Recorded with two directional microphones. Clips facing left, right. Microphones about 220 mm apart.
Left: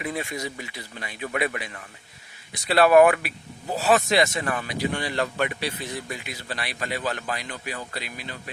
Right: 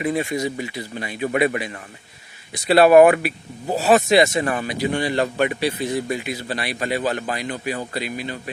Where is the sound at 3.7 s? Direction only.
30° right (ahead or behind).